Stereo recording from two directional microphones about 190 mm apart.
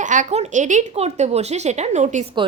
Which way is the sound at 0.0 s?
40° right (ahead or behind).